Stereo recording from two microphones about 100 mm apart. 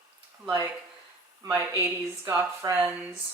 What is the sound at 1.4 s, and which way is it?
Speech, 30° right (ahead or behind).